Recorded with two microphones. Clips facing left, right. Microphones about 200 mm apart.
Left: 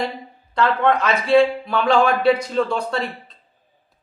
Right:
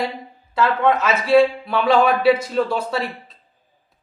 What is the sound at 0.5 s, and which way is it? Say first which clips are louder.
A man's voice: even; 5° right (ahead or behind).